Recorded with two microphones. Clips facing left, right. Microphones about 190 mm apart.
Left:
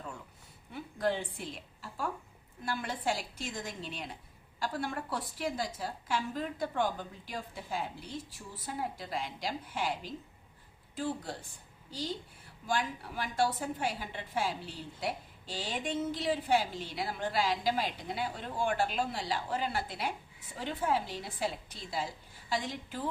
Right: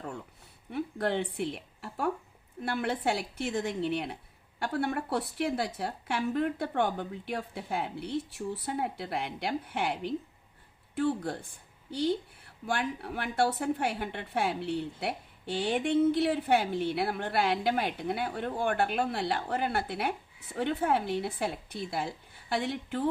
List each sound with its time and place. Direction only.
0.7 s a woman's voice: 65° right (ahead or behind)